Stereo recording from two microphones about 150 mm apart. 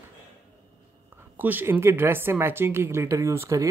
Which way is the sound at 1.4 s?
15° right (ahead or behind).